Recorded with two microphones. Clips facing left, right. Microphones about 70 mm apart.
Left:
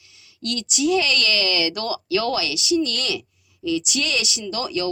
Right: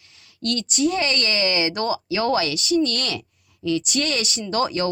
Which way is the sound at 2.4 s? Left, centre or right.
Right.